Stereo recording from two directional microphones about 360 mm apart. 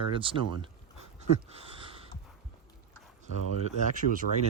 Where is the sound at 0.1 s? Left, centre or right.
Centre.